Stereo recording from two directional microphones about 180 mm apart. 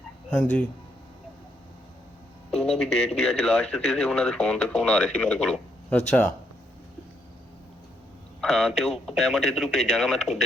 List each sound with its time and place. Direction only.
2.5 s speech: 5° left (ahead or behind)
8.4 s speech: centre (ahead or behind)